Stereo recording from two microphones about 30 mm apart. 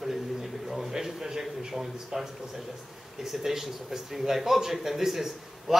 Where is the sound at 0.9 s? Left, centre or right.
Centre.